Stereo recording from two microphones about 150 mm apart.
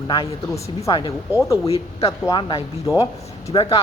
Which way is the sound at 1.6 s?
40° left (ahead or behind).